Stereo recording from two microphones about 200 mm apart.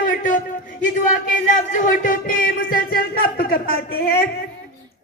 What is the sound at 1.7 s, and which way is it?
Music, 40° left (ahead or behind).